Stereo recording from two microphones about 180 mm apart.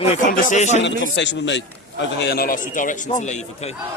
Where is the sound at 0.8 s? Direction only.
80° left; by 2.9 s 50° left (ahead or behind).